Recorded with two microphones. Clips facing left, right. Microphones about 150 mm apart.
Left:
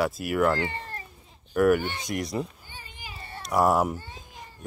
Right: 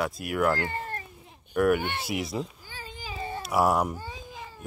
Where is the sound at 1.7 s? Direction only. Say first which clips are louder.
Even; 55° right (ahead or behind).